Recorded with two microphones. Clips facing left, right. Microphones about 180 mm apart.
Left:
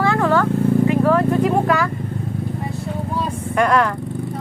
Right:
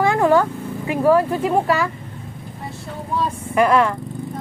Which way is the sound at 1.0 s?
5° right (ahead or behind).